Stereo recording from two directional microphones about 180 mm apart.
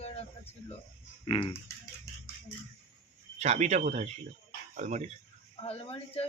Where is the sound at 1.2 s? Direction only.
30° left (ahead or behind).